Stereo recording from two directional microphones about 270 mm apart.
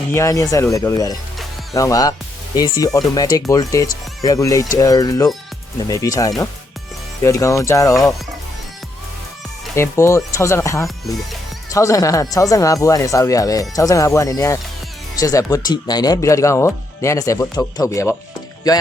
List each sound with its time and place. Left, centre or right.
0.1 s speech: centre
9.7 s speech: centre